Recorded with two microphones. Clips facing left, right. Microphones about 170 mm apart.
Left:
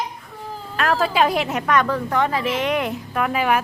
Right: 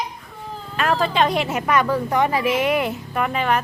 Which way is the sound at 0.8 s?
Centre (ahead or behind).